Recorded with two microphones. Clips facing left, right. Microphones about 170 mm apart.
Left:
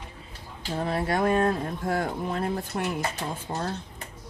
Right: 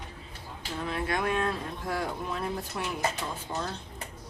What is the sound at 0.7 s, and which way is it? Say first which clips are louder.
Speech: left 5 dB; 40° left (ahead or behind).